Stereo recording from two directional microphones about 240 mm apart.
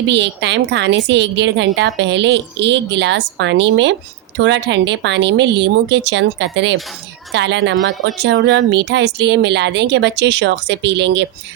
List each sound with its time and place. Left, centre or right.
0.1 s speech: right